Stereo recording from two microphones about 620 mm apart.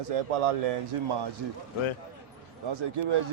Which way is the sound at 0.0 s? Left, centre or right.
Right.